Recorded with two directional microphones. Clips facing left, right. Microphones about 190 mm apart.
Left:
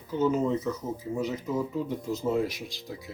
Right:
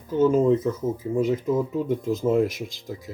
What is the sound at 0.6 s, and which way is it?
Speech, 50° right (ahead or behind).